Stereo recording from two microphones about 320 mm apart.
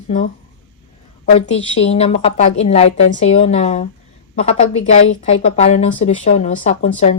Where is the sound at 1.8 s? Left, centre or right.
Centre.